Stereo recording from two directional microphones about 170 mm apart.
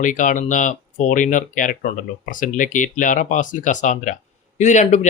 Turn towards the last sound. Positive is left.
turn(degrees=45)  # may be behind; listen again after turning